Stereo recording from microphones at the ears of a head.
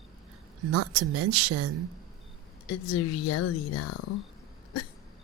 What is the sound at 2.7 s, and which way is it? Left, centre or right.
A woman's voice, left.